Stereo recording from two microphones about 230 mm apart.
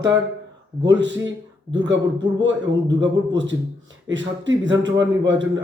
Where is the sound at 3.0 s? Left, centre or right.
Right.